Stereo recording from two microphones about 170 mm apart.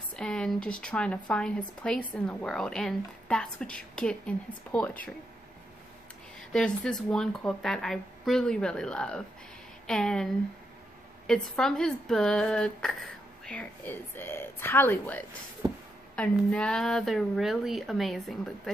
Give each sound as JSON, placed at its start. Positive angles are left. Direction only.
{"t": 0.1, "sound": "a woman's voice", "side_deg": 5}
{"t": 6.5, "sound": "a woman's voice", "side_deg": 5}
{"t": 15.6, "sound": "speech", "side_deg": -20}
{"t": 16.2, "sound": "a woman's voice", "side_deg": 5}